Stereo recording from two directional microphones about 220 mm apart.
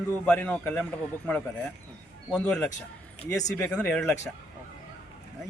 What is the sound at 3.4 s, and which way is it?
Speech, 15° left (ahead or behind).